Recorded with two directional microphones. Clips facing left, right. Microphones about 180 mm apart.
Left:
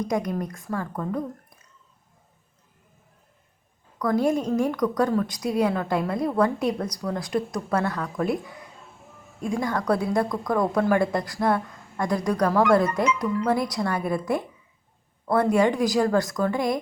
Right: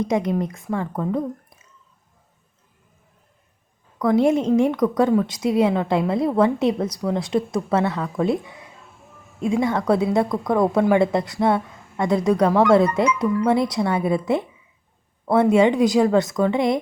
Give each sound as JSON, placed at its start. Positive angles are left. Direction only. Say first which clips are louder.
{"t": 0.0, "sound": "a woman's voice", "louder": "right 5 dB", "side_deg": -25}
{"t": 3.9, "sound": "a woman's voice", "louder": "right 5 dB", "side_deg": -25}